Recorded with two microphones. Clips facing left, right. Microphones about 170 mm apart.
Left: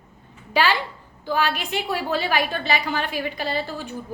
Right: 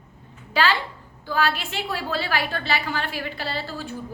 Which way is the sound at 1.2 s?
15° left (ahead or behind).